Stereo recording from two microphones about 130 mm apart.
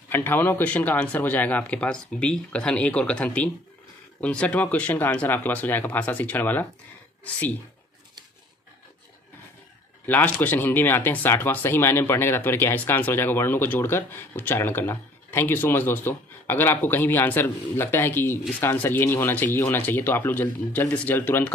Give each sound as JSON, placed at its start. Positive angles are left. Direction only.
{"t": 0.1, "sound": "speech", "side_deg": 15}
{"t": 10.0, "sound": "a man's voice", "side_deg": 15}